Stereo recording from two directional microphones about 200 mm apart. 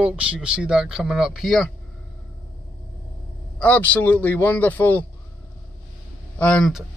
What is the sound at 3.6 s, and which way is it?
A man's voice, 10° left (ahead or behind).